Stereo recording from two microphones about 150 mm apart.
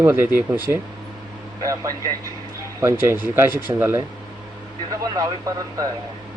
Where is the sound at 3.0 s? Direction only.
15° right (ahead or behind).